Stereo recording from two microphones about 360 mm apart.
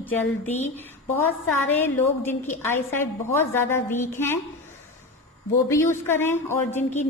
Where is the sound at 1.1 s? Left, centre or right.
Centre.